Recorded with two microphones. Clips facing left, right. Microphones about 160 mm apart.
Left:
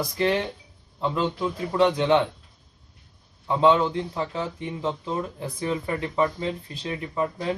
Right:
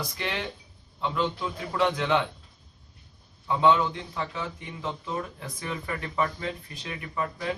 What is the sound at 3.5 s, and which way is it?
A man's voice, 30° left (ahead or behind).